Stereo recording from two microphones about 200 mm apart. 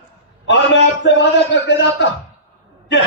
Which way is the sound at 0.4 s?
60° left (ahead or behind).